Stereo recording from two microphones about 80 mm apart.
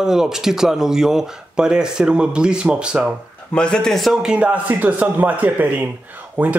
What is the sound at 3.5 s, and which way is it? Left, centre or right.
Speech, centre.